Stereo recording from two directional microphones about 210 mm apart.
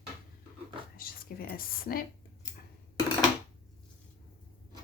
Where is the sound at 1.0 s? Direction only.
45° left (ahead or behind).